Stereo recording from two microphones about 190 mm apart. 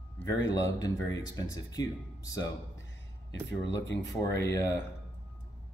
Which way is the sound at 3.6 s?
70° left (ahead or behind).